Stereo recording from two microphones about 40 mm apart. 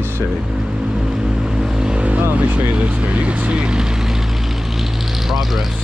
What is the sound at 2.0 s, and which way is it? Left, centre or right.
Vehicle, right.